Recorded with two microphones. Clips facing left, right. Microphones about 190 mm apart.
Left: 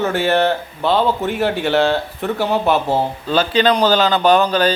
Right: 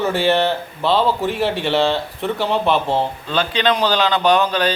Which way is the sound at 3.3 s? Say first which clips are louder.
Left 6 dB; 40° left (ahead or behind).